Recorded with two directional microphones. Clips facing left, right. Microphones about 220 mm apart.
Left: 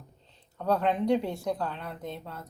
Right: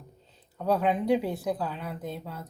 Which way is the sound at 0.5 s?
5° right (ahead or behind).